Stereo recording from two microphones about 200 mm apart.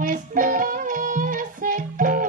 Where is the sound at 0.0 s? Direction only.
40° right (ahead or behind).